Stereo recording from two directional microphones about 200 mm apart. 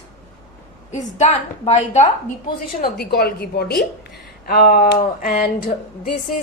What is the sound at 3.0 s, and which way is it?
A woman's voice, 55° left (ahead or behind).